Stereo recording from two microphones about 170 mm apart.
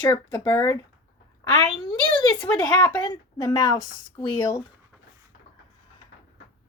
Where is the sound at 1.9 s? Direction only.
20° left (ahead or behind).